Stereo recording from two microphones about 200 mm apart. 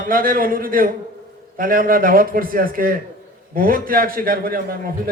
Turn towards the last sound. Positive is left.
turn(degrees=-45)  # may be behind; listen again after turning